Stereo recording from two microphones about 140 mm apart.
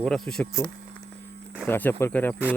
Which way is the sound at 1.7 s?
15° left (ahead or behind).